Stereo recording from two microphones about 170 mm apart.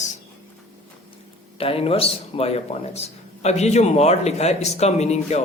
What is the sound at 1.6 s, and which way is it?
A man's voice, 35° left (ahead or behind).